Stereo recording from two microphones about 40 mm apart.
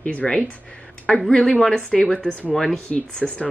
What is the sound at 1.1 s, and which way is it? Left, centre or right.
Speech, left.